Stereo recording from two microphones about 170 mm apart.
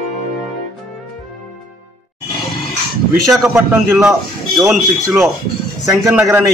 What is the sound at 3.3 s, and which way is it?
A man's voice, 10° right (ahead or behind).